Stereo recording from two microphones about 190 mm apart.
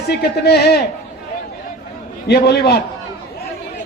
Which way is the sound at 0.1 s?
60° left (ahead or behind).